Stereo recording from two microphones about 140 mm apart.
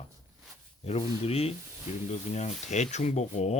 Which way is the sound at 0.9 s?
50° left (ahead or behind).